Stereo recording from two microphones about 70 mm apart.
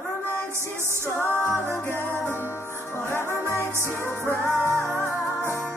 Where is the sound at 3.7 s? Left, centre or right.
Right.